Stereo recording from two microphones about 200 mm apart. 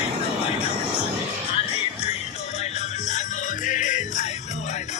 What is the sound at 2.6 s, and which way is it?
Music, 35° left (ahead or behind).